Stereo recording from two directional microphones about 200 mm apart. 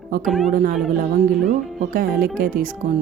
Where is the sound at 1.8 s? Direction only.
45° right (ahead or behind).